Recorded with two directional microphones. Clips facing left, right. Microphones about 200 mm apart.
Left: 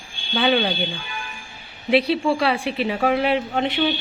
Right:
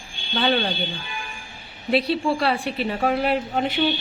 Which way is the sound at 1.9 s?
Centre (ahead or behind).